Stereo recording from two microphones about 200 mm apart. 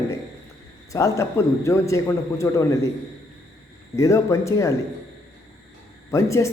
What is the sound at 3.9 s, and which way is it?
Speech, 15° left (ahead or behind).